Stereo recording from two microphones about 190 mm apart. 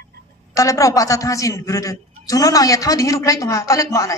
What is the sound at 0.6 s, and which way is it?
A man's voice, 15° left (ahead or behind).